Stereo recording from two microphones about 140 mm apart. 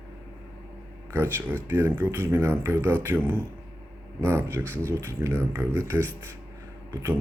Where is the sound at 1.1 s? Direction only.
15° right (ahead or behind).